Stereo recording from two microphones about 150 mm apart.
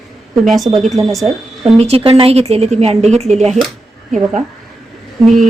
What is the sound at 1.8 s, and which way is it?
A woman's voice, 40° right (ahead or behind).